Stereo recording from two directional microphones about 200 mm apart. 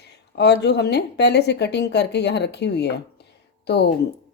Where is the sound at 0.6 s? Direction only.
55° left (ahead or behind).